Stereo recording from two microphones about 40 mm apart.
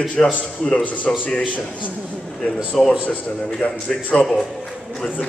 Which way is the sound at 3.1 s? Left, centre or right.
Left.